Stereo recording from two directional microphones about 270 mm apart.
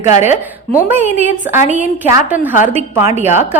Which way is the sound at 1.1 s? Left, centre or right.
Left.